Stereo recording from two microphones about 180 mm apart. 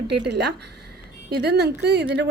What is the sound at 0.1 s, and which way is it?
A woman's voice, 70° right (ahead or behind).